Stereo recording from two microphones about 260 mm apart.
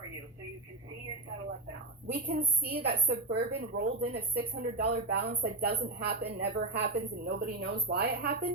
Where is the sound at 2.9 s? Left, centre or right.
Right.